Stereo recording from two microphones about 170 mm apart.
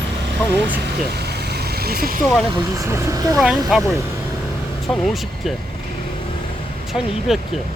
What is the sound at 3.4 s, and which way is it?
Speech, centre (ahead or behind).